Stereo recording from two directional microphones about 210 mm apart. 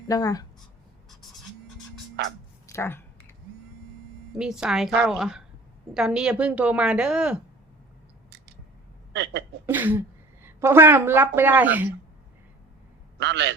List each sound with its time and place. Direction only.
0.1 s speech: 15° left (ahead or behind)
2.6 s typing: 10° left (ahead or behind)
4.3 s a woman's voice: centre (ahead or behind)
9.1 s speech: 55° right (ahead or behind)
9.6 s speech: 10° right (ahead or behind)
13.1 s a man's voice: 55° right (ahead or behind)